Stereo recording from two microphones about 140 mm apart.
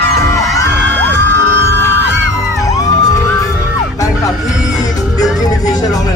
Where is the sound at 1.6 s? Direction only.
15° left (ahead or behind).